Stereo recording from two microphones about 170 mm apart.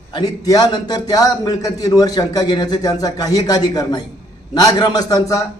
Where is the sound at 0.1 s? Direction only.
25° left (ahead or behind).